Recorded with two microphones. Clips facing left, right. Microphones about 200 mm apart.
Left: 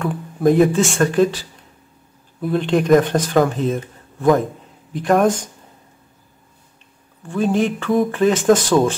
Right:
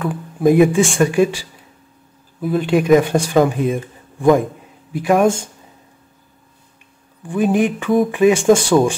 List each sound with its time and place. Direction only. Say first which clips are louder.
0.0 s speech: right 1 dB; centre (ahead or behind)
7.2 s speech: right 2 dB; 15° right (ahead or behind)